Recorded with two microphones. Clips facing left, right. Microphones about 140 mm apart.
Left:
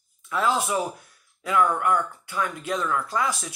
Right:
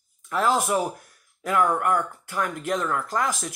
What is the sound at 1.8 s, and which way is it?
Speech, 45° right (ahead or behind).